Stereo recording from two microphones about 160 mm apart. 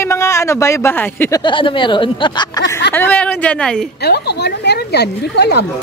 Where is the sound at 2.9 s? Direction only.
10° left (ahead or behind).